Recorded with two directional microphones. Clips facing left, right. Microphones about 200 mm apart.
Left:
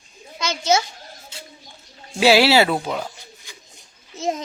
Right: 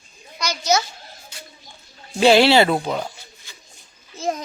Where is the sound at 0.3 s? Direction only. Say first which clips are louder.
Left 1 dB; 25° left (ahead or behind).